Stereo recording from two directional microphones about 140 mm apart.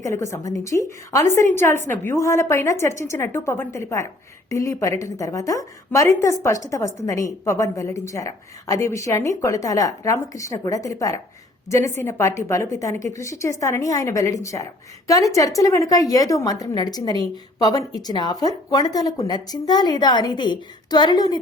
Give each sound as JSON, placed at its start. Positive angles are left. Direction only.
{"t": 0.0, "sound": "a woman's voice", "side_deg": 20}